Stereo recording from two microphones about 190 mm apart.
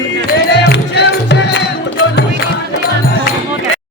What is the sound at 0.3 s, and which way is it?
Music, 60° left (ahead or behind).